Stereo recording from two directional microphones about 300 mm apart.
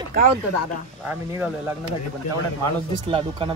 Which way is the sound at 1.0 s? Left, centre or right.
Centre.